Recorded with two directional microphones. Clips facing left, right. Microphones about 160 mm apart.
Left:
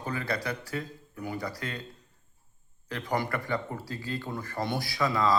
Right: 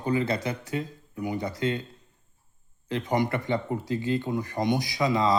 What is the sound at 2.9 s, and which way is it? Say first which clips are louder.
Speech: right 5 dB; 20° right (ahead or behind).